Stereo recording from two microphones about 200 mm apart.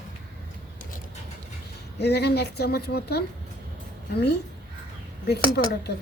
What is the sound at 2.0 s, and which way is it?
A woman's voice, 55° left (ahead or behind).